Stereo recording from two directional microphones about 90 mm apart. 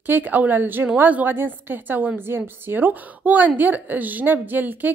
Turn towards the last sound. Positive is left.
turn(degrees=-20)  # may be behind; listen again after turning